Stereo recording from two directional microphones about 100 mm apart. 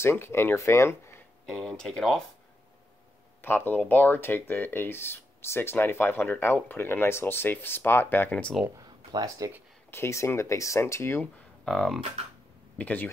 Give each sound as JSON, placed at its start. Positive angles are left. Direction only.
{"t": 0.0, "sound": "speech", "side_deg": 25}
{"t": 1.4, "sound": "speech", "side_deg": 0}
{"t": 3.4, "sound": "speech", "side_deg": 20}
{"t": 8.6, "sound": "speech", "side_deg": -35}
{"t": 9.8, "sound": "speech", "side_deg": 25}
{"t": 11.6, "sound": "speech", "side_deg": 5}
{"t": 12.7, "sound": "speech", "side_deg": 15}